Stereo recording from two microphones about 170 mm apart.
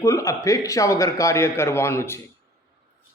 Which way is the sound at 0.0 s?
20° left (ahead or behind).